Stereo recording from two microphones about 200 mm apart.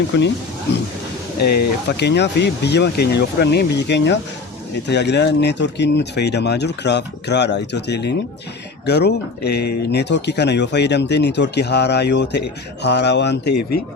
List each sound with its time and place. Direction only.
0.1 s speech: 65° left (ahead or behind)